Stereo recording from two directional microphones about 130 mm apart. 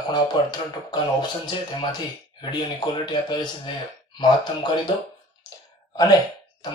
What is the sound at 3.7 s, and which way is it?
Speech, 40° left (ahead or behind).